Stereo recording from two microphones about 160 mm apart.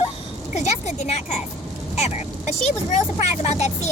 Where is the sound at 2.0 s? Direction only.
45° left (ahead or behind).